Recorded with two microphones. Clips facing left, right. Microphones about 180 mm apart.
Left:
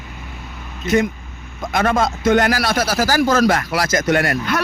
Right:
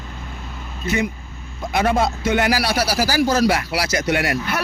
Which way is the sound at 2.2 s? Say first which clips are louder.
Left 3 dB; 50° left (ahead or behind).